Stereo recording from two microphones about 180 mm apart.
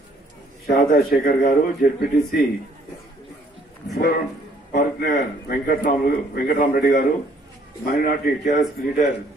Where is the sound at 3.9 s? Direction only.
55° left (ahead or behind).